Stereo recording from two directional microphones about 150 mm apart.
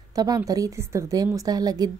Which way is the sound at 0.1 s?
25° right (ahead or behind).